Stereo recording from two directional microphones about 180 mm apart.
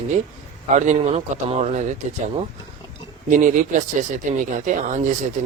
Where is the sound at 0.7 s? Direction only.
40° right (ahead or behind).